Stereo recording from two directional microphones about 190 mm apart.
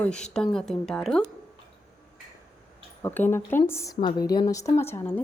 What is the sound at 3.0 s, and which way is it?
A woman's voice, 10° left (ahead or behind).